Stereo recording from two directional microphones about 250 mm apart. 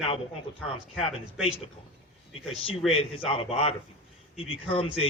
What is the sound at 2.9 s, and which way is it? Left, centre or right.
A man's voice, left.